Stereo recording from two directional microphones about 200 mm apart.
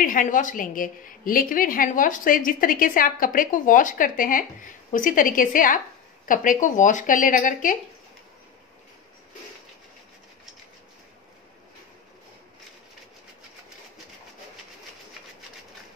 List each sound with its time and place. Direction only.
0.0 s a woman's voice: 40° left (ahead or behind)